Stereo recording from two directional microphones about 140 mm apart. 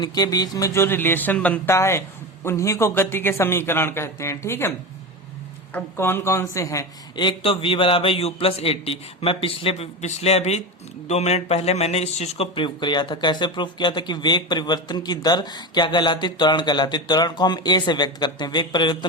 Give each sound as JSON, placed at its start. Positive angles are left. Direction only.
{"t": 0.0, "sound": "speech", "side_deg": 30}
{"t": 5.7, "sound": "speech", "side_deg": 15}
{"t": 7.3, "sound": "a man's voice", "side_deg": 40}